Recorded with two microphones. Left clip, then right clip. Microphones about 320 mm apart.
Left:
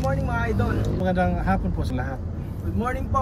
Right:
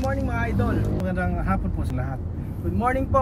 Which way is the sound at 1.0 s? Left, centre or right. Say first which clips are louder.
Left 4 dB; centre.